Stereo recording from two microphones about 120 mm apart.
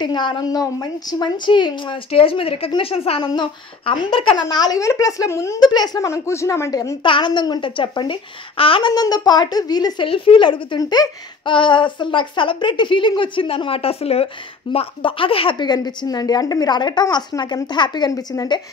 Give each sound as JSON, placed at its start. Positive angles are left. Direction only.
{"t": 0.0, "sound": "speech", "side_deg": 40}
{"t": 3.3, "sound": "speech", "side_deg": 40}
{"t": 7.1, "sound": "speech", "side_deg": 40}
{"t": 8.9, "sound": "speech", "side_deg": 35}
{"t": 10.0, "sound": "speech", "side_deg": 45}